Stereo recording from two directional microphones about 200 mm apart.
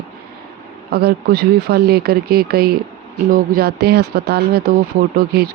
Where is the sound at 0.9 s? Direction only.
50° right (ahead or behind).